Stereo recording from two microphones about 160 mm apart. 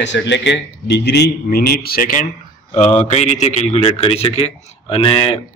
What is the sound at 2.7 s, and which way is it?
A man's voice, 45° left (ahead or behind).